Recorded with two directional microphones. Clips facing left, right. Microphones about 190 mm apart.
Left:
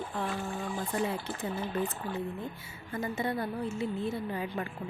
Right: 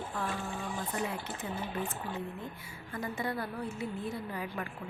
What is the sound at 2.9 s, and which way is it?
A woman's voice, 25° left (ahead or behind).